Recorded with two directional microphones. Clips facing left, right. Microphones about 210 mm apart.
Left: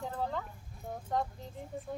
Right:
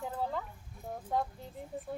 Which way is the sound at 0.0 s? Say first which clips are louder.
Even; 5° right (ahead or behind).